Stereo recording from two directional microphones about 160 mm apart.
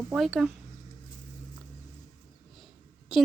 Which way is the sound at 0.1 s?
Centre (ahead or behind).